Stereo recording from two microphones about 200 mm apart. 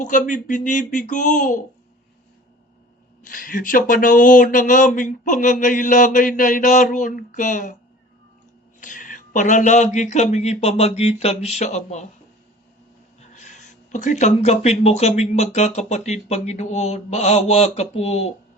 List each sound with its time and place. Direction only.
0.0 s speech: 40° left (ahead or behind)
3.2 s speech: 45° left (ahead or behind)
8.8 s speech: 40° left (ahead or behind)
13.3 s speech: 35° left (ahead or behind)